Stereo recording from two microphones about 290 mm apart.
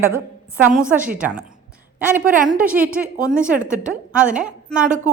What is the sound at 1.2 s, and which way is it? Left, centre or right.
Speech, centre.